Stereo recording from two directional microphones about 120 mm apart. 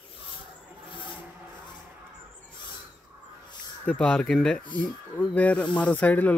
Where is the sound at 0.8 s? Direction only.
45° left (ahead or behind).